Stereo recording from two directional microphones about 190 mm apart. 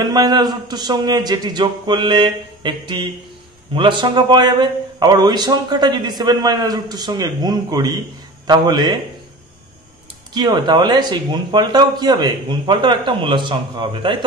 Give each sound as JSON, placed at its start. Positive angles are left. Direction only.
{"t": 0.0, "sound": "a man's voice", "side_deg": -20}
{"t": 10.3, "sound": "a man's voice", "side_deg": -20}